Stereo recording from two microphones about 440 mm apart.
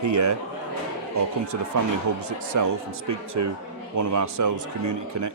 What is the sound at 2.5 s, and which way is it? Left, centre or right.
A man's voice, right.